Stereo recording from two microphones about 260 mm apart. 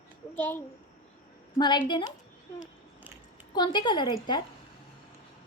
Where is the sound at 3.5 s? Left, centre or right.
Centre.